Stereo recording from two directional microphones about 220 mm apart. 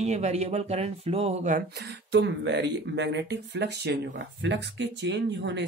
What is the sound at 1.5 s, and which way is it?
Speech, 50° right (ahead or behind).